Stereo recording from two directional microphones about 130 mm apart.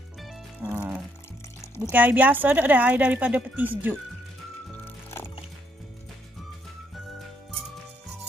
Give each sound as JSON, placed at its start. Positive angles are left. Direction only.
{"t": 0.6, "sound": "music", "side_deg": -10}
{"t": 1.9, "sound": "speech", "side_deg": -15}
{"t": 4.8, "sound": "music", "side_deg": 20}